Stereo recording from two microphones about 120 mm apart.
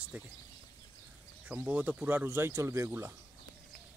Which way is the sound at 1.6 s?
15° right (ahead or behind).